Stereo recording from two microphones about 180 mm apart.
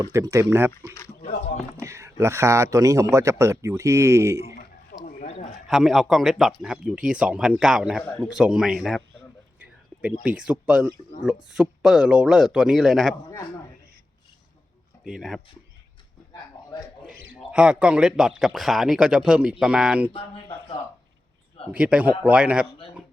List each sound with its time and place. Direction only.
0.0 s speech: 20° right (ahead or behind)
1.2 s speech: 40° left (ahead or behind)
1.7 s speech: 15° right (ahead or behind)
4.9 s a sound: 65° left (ahead or behind)
5.6 s a man's voice: centre (ahead or behind)
15.0 s a man's voice: centre (ahead or behind)
17.1 s a man's voice: 5° right (ahead or behind)
20.1 s a sound: 30° left (ahead or behind)
21.7 s a man's voice: 5° right (ahead or behind)